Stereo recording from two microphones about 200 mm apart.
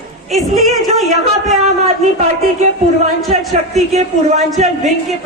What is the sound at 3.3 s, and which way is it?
A woman's voice, 35° right (ahead or behind).